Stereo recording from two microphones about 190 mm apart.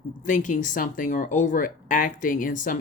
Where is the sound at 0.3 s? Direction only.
40° left (ahead or behind).